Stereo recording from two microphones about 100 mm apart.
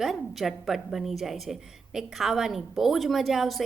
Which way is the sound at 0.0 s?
Centre (ahead or behind).